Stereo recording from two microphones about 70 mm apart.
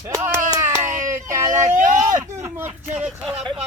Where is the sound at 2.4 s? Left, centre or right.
Right.